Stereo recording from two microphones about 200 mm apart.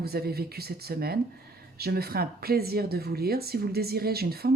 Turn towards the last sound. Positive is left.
turn(degrees=-50)  # may be behind; listen again after turning